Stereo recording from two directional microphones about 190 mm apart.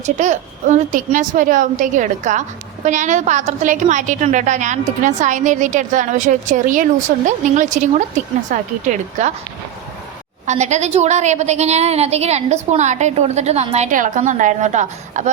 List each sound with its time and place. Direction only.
0.0 s a woman's voice: 40° right (ahead or behind)
10.4 s a woman's voice: 40° right (ahead or behind)